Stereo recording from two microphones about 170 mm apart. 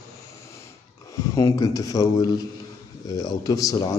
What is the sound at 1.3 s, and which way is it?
A man's voice, 20° left (ahead or behind).